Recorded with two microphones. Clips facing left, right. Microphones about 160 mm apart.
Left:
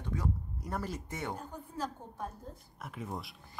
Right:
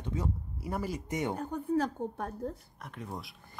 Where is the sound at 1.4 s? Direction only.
65° right (ahead or behind).